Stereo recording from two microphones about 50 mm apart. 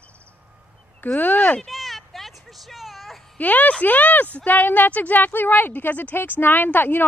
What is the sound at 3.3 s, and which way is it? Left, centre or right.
A woman's voice, left.